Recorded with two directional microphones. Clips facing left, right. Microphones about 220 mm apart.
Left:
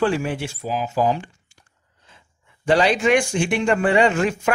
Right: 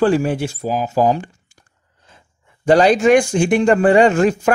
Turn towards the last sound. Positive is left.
turn(degrees=-40)  # may be behind; listen again after turning